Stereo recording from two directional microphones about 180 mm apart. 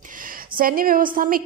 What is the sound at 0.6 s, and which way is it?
Speech, 50° right (ahead or behind).